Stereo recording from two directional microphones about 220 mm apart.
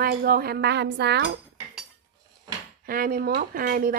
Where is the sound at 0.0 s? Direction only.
45° right (ahead or behind).